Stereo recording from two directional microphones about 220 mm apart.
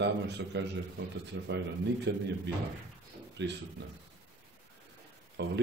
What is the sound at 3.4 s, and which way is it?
Speech, 50° right (ahead or behind).